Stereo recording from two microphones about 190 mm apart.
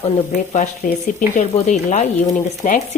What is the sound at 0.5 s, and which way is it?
Speech, 40° left (ahead or behind).